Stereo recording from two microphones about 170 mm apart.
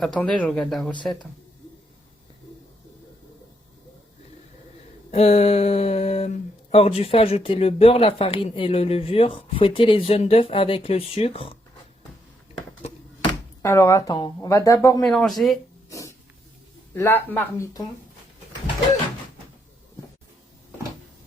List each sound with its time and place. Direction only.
0.0 s speech: 5° left (ahead or behind)
5.1 s speech: 40° left (ahead or behind)
13.6 s speech: 15° left (ahead or behind)
15.0 s speech: centre (ahead or behind)
15.9 s a sound: 20° left (ahead or behind)
16.9 s speech: 15° left (ahead or behind)